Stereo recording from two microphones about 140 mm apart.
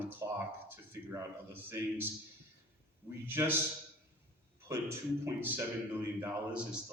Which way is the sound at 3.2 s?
15° right (ahead or behind).